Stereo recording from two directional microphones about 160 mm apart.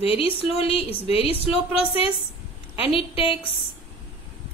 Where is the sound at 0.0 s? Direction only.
35° left (ahead or behind).